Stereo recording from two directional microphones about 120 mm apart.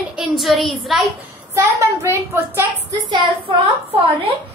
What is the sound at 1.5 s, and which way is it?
A woman's voice, 20° right (ahead or behind).